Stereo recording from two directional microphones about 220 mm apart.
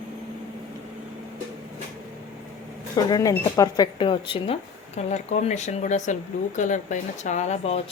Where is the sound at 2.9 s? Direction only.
15° left (ahead or behind).